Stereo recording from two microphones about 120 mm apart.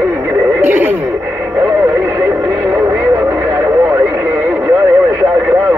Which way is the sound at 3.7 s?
25° right (ahead or behind).